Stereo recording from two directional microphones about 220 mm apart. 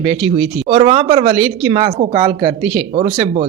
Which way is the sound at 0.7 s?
25° right (ahead or behind).